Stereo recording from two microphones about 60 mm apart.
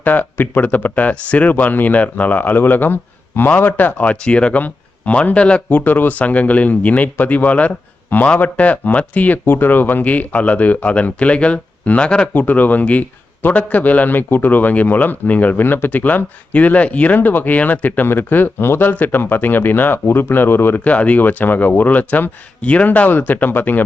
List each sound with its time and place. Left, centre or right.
0.0 s a man's voice: left
5.6 s a man's voice: left
12.3 s a man's voice: left
20.8 s a man's voice: left